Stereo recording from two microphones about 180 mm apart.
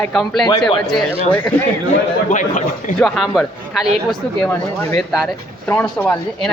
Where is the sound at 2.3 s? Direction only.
45° left (ahead or behind).